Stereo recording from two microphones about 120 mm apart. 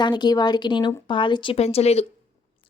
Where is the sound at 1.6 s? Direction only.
60° left (ahead or behind).